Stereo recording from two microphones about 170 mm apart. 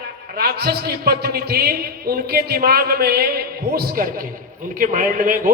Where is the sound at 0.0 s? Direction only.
70° right (ahead or behind).